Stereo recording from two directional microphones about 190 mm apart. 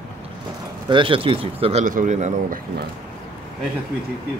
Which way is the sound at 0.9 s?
25° right (ahead or behind).